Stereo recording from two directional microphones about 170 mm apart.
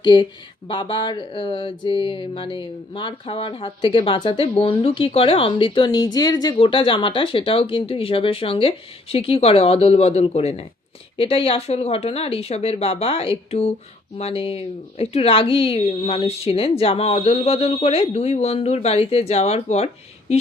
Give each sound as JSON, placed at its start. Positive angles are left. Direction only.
{"t": 0.0, "sound": "speech", "side_deg": 25}